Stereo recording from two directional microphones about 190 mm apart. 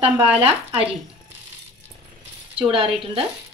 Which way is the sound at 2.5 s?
30° right (ahead or behind).